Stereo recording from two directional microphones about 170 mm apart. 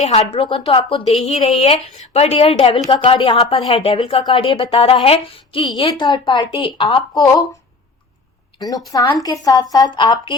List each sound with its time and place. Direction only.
0.0 s a woman's voice: 35° left (ahead or behind)
8.5 s a woman's voice: 20° left (ahead or behind)